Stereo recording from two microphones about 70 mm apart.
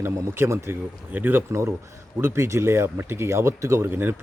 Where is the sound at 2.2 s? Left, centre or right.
Right.